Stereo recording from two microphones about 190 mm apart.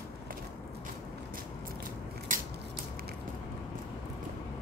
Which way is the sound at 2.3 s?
45° right (ahead or behind).